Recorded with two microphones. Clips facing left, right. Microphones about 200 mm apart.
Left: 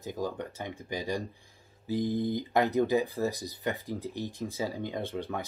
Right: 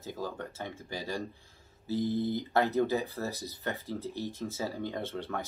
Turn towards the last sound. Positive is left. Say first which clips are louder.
# left 2 dB
turn(degrees=15)  # may be behind; listen again after turning